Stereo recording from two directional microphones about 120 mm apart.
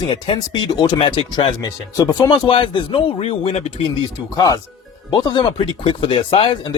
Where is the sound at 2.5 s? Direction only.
45° left (ahead or behind).